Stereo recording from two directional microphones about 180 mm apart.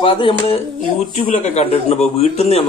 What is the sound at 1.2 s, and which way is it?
A man's voice, 45° left (ahead or behind).